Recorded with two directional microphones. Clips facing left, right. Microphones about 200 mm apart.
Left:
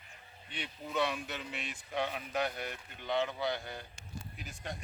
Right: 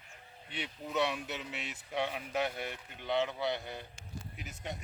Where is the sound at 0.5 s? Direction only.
20° right (ahead or behind).